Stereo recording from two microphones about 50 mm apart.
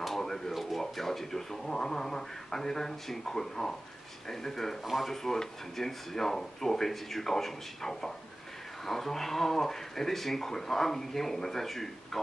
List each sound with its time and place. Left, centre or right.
0.0 s speech: centre